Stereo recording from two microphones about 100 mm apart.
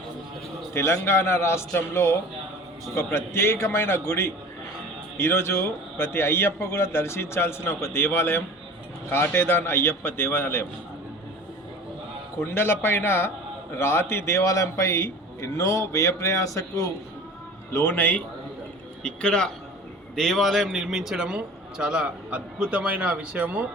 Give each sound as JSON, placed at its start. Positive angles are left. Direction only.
{"t": 0.7, "sound": "a man's voice", "side_deg": 25}
{"t": 12.4, "sound": "a man's voice", "side_deg": 25}
{"t": 19.0, "sound": "a man's voice", "side_deg": 10}